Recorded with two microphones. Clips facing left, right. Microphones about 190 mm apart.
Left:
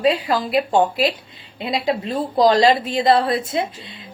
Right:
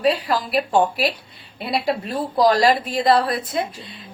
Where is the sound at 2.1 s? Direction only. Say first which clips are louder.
Left 2 dB; 25° left (ahead or behind).